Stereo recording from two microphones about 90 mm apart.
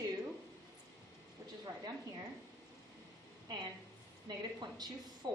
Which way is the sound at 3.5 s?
55° right (ahead or behind).